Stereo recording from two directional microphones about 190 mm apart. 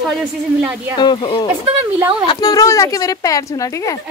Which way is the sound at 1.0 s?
25° left (ahead or behind).